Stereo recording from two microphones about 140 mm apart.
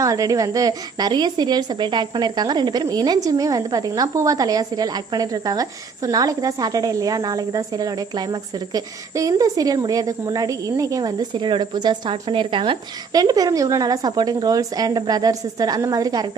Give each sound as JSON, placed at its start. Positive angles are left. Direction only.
{"t": 0.0, "sound": "a woman's voice", "side_deg": -25}